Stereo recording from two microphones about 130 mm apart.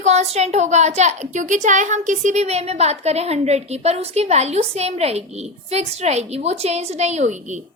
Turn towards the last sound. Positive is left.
turn(degrees=-65)  # may be behind; listen again after turning